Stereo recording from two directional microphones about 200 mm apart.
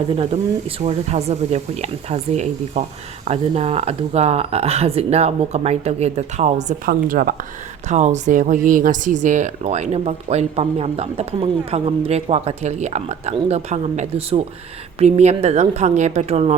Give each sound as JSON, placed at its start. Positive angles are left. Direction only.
{"t": 0.8, "sound": "speech", "side_deg": -35}